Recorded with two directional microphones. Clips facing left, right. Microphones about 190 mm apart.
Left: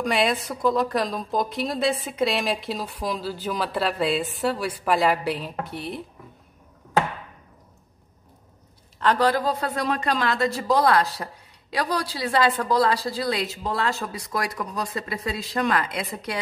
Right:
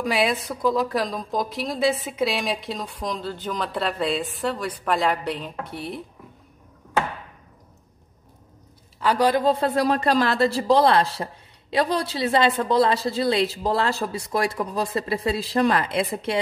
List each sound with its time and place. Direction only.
0.0 s a woman's voice: 5° right (ahead or behind)
9.0 s a woman's voice: 10° right (ahead or behind); by 16.3 s 30° right (ahead or behind)